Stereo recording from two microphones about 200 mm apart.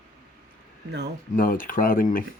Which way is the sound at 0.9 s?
60° right (ahead or behind).